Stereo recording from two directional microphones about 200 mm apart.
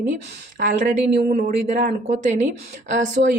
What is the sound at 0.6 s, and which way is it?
Speech, 40° right (ahead or behind).